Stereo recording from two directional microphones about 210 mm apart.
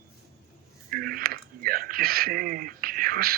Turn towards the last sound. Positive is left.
turn(degrees=-45)  # may be behind; listen again after turning